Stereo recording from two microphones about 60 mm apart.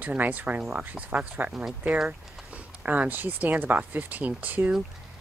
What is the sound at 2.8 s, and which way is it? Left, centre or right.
Speech, right.